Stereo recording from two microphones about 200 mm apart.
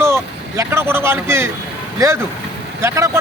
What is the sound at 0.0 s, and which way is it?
Speech, 15° right (ahead or behind).